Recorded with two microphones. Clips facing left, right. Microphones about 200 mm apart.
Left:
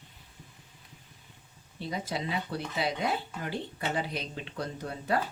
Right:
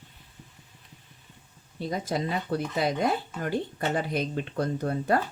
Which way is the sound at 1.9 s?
45° right (ahead or behind).